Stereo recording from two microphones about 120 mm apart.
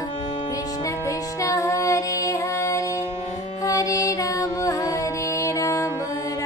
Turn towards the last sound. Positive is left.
turn(degrees=25)  # may be behind; listen again after turning